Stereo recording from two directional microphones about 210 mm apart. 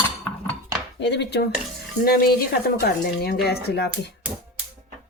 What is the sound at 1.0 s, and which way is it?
Speech, 55° left (ahead or behind).